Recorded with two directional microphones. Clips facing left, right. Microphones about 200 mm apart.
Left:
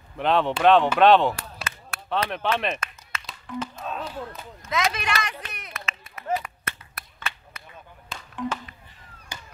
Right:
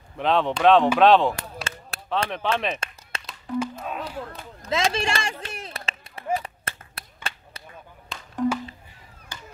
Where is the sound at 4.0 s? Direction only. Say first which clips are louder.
Even; 35° right (ahead or behind).